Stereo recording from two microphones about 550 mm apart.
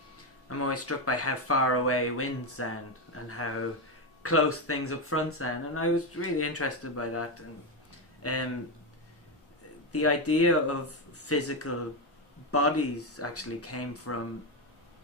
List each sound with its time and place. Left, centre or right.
0.5 s speech: left
4.2 s speech: left
9.9 s speech: left